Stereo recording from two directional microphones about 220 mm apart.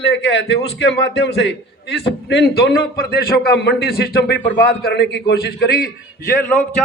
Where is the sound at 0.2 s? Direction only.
55° left (ahead or behind).